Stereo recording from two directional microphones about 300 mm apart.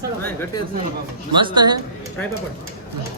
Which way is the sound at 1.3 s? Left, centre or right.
Centre.